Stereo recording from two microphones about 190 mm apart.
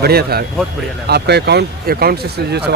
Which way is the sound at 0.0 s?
55° right (ahead or behind).